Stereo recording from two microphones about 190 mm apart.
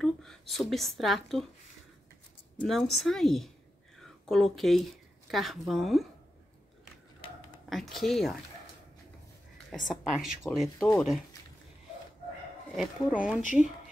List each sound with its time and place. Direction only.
0.0 s speech: centre (ahead or behind)
2.6 s speech: centre (ahead or behind)
7.7 s speech: centre (ahead or behind)
9.8 s speech: centre (ahead or behind)
12.7 s speech: 5° right (ahead or behind)
13.4 s a woman's voice: 40° left (ahead or behind)